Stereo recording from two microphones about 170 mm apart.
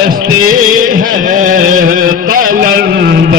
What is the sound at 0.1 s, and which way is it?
Music, 55° right (ahead or behind).